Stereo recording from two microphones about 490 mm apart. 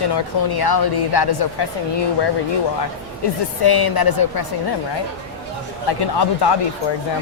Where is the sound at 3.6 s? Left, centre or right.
Left.